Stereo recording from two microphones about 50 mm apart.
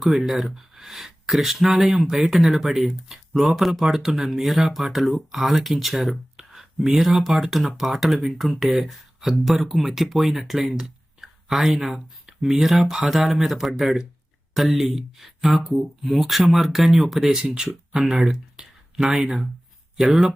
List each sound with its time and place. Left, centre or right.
0.0 s speech: centre
17.4 s speech: centre
18.0 s speech: centre